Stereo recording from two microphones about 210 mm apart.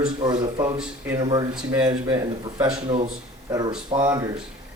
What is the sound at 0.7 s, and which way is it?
Speech, 5° right (ahead or behind).